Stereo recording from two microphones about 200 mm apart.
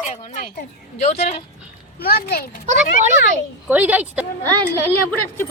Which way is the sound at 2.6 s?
40° right (ahead or behind).